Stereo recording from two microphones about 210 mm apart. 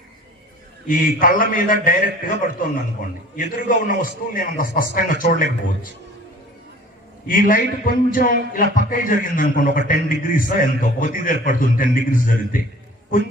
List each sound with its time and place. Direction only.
0.9 s a man's voice: 40° left (ahead or behind)
7.3 s a man's voice: 40° left (ahead or behind)